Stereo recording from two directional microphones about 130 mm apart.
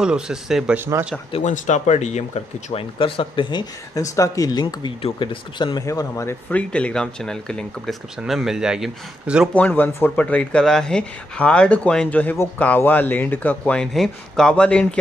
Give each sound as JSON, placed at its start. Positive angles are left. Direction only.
{"t": 0.0, "sound": "speech", "side_deg": -5}
{"t": 0.7, "sound": "speech", "side_deg": -20}
{"t": 1.4, "sound": "speech", "side_deg": 65}
{"t": 3.0, "sound": "speech", "side_deg": 45}
{"t": 5.9, "sound": "speech", "side_deg": 25}
{"t": 6.5, "sound": "speech", "side_deg": 10}
{"t": 9.5, "sound": "speech", "side_deg": 15}